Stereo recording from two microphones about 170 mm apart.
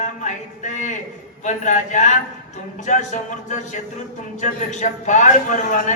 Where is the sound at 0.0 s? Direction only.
45° left (ahead or behind).